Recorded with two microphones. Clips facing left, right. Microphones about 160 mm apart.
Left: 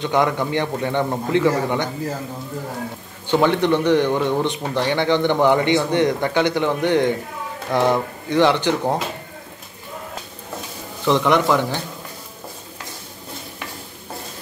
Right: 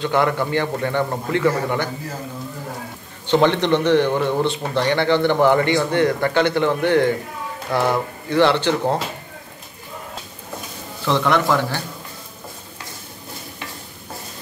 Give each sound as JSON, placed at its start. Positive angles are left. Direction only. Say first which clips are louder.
{"t": 0.0, "sound": "speech", "louder": "even", "side_deg": 15}
{"t": 3.3, "sound": "speech", "louder": "right 1 dB", "side_deg": 10}
{"t": 11.1, "sound": "speech", "louder": "left 2 dB", "side_deg": 15}